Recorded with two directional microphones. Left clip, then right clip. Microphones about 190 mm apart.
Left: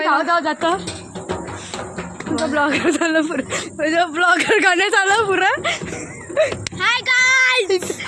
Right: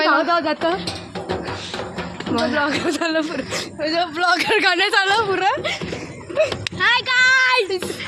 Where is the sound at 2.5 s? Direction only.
45° left (ahead or behind); by 5.8 s 60° left (ahead or behind).